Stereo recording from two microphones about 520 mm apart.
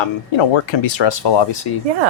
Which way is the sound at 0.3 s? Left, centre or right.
Left.